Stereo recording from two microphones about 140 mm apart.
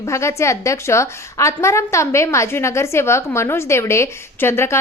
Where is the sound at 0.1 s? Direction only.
20° left (ahead or behind).